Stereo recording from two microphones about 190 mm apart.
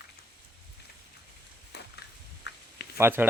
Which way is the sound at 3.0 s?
10° right (ahead or behind).